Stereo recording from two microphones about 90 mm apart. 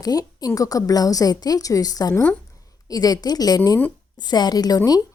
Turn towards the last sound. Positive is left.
turn(degrees=45)  # may be behind; listen again after turning